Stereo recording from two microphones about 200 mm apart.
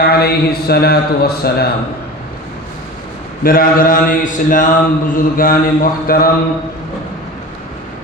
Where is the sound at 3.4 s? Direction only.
45° left (ahead or behind).